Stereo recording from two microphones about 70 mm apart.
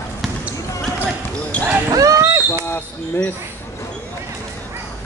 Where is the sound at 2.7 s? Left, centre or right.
Left.